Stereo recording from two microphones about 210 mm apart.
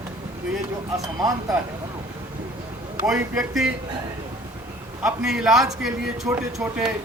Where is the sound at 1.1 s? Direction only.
15° right (ahead or behind).